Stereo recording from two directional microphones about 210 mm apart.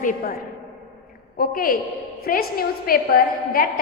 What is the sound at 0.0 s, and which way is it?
Speech, 40° left (ahead or behind).